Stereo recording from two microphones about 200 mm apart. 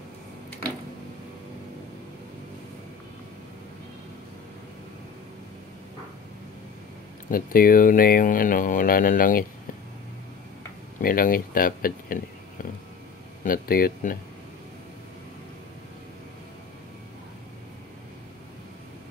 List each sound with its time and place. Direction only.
7.2 s speech: 45° left (ahead or behind)
11.0 s speech: 45° left (ahead or behind)
13.4 s speech: 45° left (ahead or behind)